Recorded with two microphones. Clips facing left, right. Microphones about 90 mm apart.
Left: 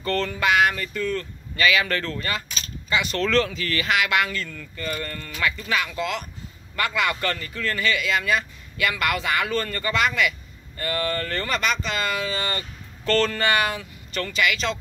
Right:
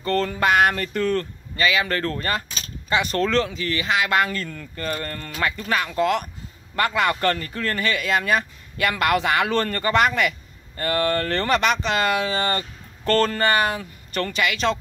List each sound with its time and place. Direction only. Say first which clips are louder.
0.0 s speech: right 2 dB; 35° right (ahead or behind); by 1.2 s 55° right (ahead or behind)
1.6 s speech: even; 30° right (ahead or behind)
2.0 s speech: right 4 dB; 45° right (ahead or behind)
3.2 s speech: right 1 dB; 30° right (ahead or behind); by 14.8 s 50° right (ahead or behind)